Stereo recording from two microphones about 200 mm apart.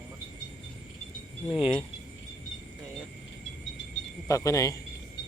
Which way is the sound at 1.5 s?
25° left (ahead or behind).